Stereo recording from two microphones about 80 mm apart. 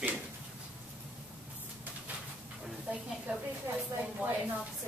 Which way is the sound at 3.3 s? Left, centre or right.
Centre.